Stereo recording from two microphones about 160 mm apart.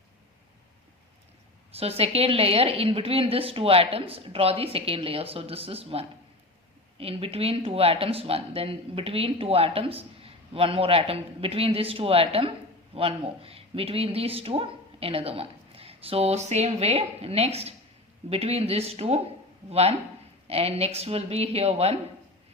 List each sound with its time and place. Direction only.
1.7 s speech: 40° right (ahead or behind)